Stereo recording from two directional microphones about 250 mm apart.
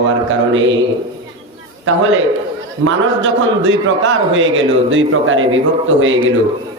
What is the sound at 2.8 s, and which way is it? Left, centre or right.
A man's voice, right.